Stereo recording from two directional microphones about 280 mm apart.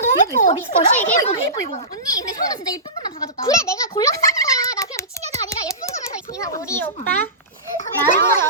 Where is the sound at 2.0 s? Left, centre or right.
Centre.